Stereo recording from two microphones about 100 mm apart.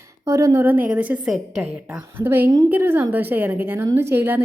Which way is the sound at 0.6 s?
15° right (ahead or behind).